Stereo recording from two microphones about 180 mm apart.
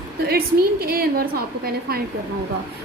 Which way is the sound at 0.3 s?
55° right (ahead or behind).